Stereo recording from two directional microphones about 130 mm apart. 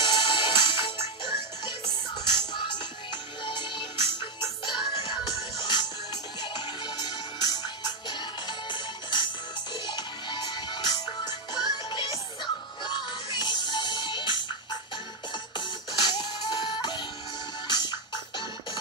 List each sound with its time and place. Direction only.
0.0 s music: 35° left (ahead or behind)
15.5 s music: 35° left (ahead or behind)